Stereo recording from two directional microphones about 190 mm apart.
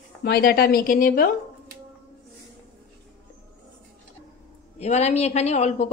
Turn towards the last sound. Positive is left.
turn(degrees=35)  # may be behind; listen again after turning